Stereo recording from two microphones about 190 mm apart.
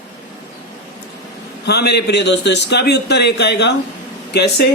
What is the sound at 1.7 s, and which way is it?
A man's voice, 60° left (ahead or behind).